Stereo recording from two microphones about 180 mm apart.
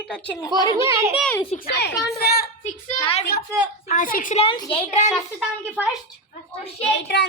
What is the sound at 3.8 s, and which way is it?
Speech, 50° left (ahead or behind).